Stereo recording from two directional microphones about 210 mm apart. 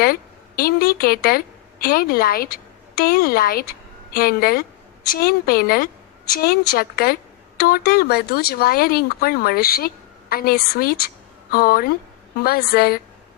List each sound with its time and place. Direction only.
0.0 s a woman's voice: 45° left (ahead or behind)